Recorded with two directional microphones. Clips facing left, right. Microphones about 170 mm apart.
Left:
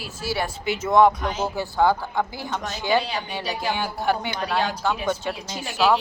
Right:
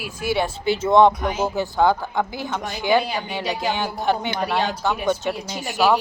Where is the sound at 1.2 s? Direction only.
10° right (ahead or behind).